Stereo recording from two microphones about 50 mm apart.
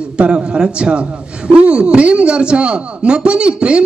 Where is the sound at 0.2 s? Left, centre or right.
Centre.